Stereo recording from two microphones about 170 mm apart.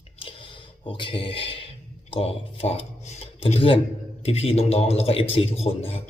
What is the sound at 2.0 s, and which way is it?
A man's voice, 35° left (ahead or behind).